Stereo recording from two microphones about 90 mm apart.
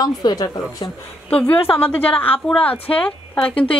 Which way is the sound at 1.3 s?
15° left (ahead or behind).